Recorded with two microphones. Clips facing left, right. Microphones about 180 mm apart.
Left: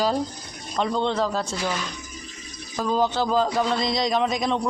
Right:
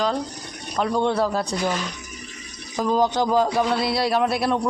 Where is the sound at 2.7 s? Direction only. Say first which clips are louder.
Right 2 dB; 10° right (ahead or behind).